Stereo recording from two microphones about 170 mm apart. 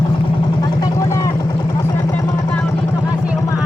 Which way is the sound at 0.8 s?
20° left (ahead or behind).